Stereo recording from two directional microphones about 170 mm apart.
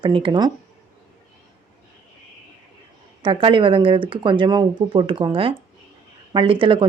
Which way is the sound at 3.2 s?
30° right (ahead or behind).